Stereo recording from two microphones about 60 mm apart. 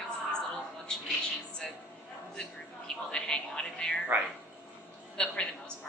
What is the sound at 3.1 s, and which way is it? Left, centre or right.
Speech, centre.